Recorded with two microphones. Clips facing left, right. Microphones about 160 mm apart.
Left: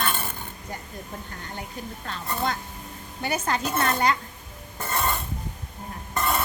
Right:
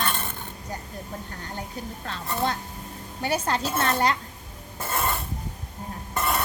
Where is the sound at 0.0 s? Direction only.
5° left (ahead or behind).